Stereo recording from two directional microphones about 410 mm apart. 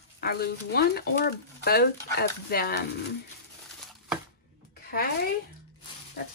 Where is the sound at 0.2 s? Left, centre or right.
Left.